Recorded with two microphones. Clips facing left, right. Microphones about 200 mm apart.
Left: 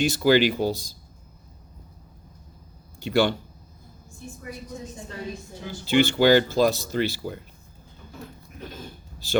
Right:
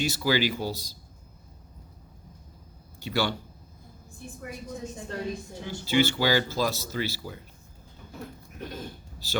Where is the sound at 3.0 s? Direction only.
55° left (ahead or behind).